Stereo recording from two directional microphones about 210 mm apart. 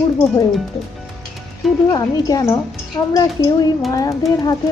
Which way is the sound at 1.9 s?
20° left (ahead or behind).